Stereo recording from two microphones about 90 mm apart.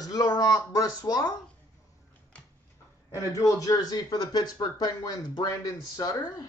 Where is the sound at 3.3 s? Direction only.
40° left (ahead or behind).